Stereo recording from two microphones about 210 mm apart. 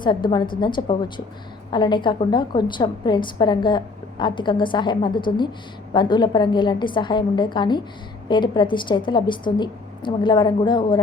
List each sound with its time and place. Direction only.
0.0 s a woman's voice: 20° left (ahead or behind)